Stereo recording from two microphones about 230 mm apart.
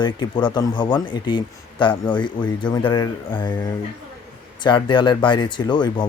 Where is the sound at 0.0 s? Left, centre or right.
Centre.